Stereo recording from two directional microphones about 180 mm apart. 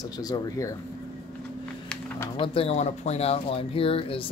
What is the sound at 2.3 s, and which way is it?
Speech, 30° left (ahead or behind).